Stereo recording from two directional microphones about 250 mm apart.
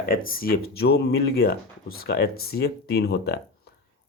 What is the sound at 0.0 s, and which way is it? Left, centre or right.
Speech, left.